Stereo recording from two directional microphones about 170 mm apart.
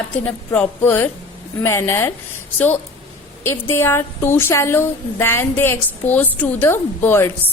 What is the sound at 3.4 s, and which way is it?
A woman's voice, 15° left (ahead or behind).